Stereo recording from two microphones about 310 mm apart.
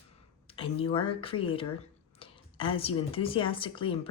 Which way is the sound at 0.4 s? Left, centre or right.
Centre.